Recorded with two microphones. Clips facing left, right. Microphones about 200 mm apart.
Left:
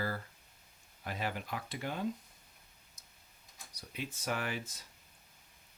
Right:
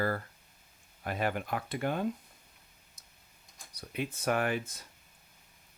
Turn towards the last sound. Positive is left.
turn(degrees=-55)  # may be behind; listen again after turning